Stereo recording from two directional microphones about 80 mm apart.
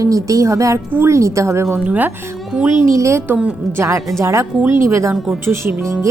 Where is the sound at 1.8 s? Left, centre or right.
Centre.